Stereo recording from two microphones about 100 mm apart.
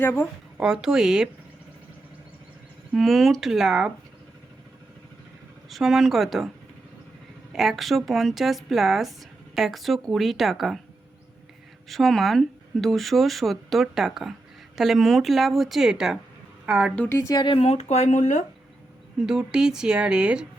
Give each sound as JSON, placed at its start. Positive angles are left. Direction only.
{"t": 0.0, "sound": "speech", "side_deg": 20}
{"t": 0.6, "sound": "speech", "side_deg": -5}
{"t": 2.9, "sound": "speech", "side_deg": 0}
{"t": 5.6, "sound": "speech", "side_deg": 0}
{"t": 7.5, "sound": "speech", "side_deg": -5}
{"t": 11.9, "sound": "speech", "side_deg": 0}
{"t": 17.1, "sound": "speech", "side_deg": 25}
{"t": 17.3, "sound": "speech", "side_deg": 55}
{"t": 19.2, "sound": "speech", "side_deg": -5}